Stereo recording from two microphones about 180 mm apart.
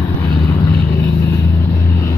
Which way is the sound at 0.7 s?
15° left (ahead or behind).